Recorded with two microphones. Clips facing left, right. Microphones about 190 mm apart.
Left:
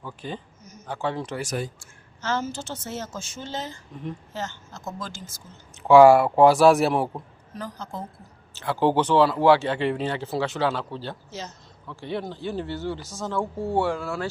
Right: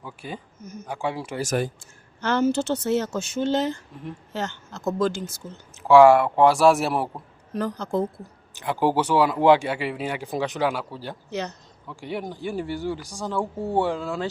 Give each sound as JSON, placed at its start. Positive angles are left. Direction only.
{"t": 0.0, "sound": "speech", "side_deg": -10}
{"t": 0.6, "sound": "speech", "side_deg": -55}
{"t": 0.9, "sound": "speech", "side_deg": -10}
{"t": 2.2, "sound": "a woman's voice", "side_deg": -65}
{"t": 5.9, "sound": "speech", "side_deg": 0}
{"t": 7.5, "sound": "a woman's voice", "side_deg": -70}
{"t": 8.5, "sound": "speech", "side_deg": -15}
{"t": 11.3, "sound": "speech", "side_deg": -65}
{"t": 11.9, "sound": "speech", "side_deg": -15}